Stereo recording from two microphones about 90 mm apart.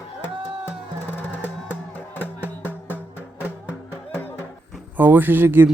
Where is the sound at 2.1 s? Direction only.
20° left (ahead or behind).